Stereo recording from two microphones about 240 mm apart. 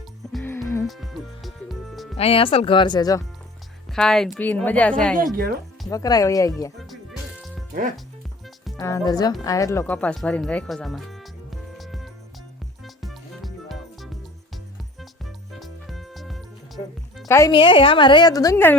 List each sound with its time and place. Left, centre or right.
0.3 s music: centre
0.9 s music: centre
2.1 s speech: left
3.8 s speech: centre
5.1 s speech: right
5.9 s a woman's voice: centre
8.6 s speech: centre
12.8 s music: centre
15.2 s music: centre
17.2 s a woman's voice: centre